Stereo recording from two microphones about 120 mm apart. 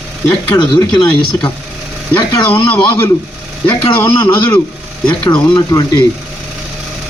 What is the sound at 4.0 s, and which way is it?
Speech, 20° left (ahead or behind).